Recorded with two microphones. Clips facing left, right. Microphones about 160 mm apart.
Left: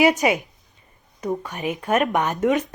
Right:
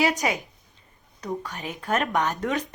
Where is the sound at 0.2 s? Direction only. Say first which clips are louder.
Left 6 dB; 20° left (ahead or behind).